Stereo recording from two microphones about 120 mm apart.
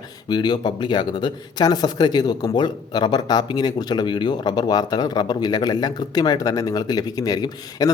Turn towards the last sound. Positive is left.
turn(degrees=30)  # may be behind; listen again after turning